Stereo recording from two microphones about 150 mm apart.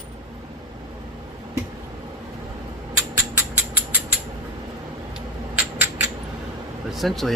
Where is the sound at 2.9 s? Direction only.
15° right (ahead or behind).